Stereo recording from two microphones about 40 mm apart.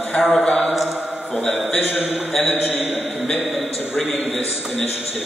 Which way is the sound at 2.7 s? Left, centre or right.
Right.